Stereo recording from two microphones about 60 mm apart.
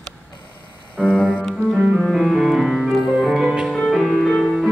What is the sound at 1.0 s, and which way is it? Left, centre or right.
Music, left.